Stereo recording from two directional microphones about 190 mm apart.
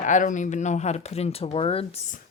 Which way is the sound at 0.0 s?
40° left (ahead or behind).